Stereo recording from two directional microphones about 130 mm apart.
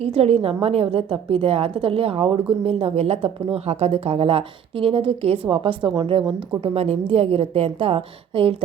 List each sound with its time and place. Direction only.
0.0 s speech: 50° right (ahead or behind)
6.7 s speech: 50° right (ahead or behind)